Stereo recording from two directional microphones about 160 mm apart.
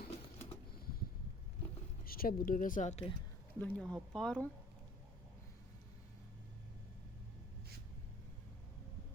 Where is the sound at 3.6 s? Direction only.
5° left (ahead or behind).